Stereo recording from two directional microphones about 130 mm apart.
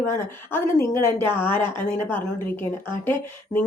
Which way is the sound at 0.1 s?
20° left (ahead or behind).